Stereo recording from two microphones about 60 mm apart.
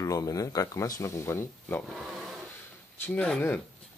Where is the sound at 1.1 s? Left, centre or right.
Left.